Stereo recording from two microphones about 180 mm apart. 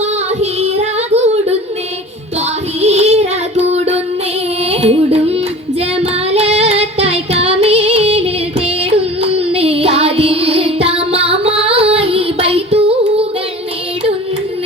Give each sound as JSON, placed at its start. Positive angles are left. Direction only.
{"t": 0.6, "sound": "child singing", "side_deg": -35}
{"t": 2.8, "sound": "child singing", "side_deg": -35}
{"t": 4.7, "sound": "carnatic music", "side_deg": -35}
{"t": 6.0, "sound": "music", "side_deg": -35}